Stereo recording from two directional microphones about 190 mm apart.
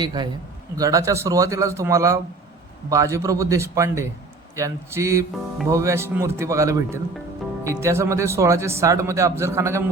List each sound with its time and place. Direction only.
0.0 s a man's voice: 20° right (ahead or behind)